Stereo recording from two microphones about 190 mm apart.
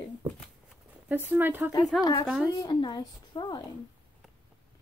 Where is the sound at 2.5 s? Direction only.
25° left (ahead or behind).